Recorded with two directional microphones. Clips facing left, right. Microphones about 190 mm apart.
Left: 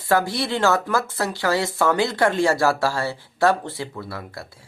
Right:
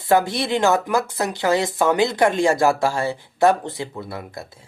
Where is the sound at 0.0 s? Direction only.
20° right (ahead or behind).